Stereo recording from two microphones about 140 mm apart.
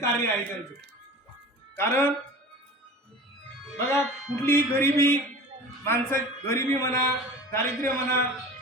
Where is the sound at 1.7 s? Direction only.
15° left (ahead or behind).